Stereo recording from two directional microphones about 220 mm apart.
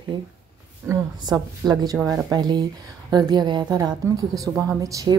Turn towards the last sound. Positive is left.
turn(degrees=-15)  # may be behind; listen again after turning